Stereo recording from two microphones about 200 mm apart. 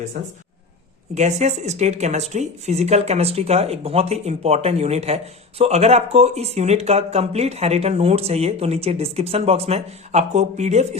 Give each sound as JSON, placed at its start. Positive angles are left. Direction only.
{"t": 0.1, "sound": "speech", "side_deg": -40}